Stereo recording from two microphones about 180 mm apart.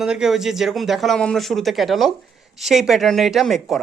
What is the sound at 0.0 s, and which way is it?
Speech, 5° right (ahead or behind).